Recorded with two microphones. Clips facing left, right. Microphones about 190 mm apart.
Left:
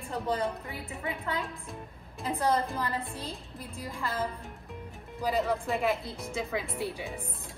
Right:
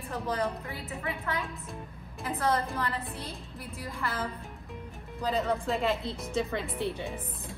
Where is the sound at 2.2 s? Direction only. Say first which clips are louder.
Left 1 dB; 15° left (ahead or behind).